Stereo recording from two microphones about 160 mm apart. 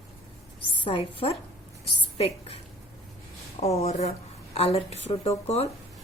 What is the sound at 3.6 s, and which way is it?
Speech, 40° left (ahead or behind).